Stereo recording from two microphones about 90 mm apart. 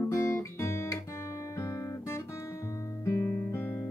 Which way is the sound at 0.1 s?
30° left (ahead or behind).